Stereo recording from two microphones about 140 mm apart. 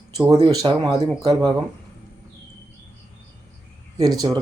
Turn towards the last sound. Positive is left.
turn(degrees=-25)  # may be behind; listen again after turning